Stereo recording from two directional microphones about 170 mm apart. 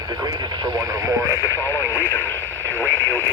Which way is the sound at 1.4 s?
15° left (ahead or behind).